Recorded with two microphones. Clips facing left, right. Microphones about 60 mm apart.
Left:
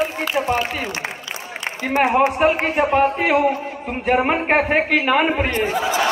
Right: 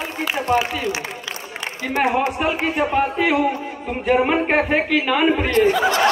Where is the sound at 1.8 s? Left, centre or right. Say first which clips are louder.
Left 3 dB; left.